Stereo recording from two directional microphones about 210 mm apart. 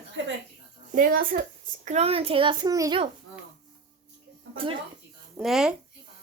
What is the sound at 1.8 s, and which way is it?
A child's voice, 30° right (ahead or behind).